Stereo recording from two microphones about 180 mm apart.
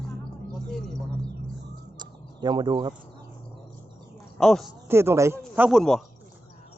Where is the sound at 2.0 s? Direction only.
25° right (ahead or behind).